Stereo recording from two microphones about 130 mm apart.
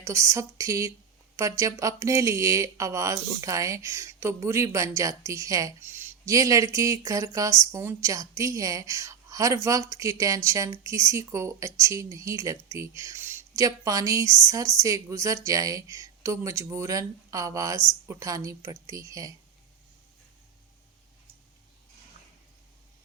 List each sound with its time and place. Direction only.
0.0 s speech: 25° right (ahead or behind)